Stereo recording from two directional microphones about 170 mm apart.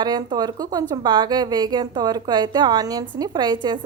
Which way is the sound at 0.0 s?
25° right (ahead or behind).